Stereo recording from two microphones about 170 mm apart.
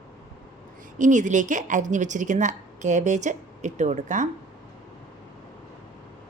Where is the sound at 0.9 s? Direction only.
45° right (ahead or behind).